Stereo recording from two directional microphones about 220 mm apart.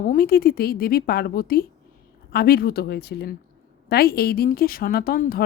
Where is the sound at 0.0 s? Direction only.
40° left (ahead or behind).